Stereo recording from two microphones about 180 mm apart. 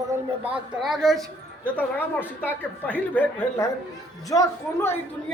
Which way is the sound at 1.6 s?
10° left (ahead or behind).